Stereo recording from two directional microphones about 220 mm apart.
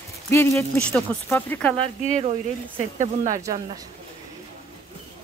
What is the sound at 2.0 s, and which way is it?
Speech, 35° right (ahead or behind).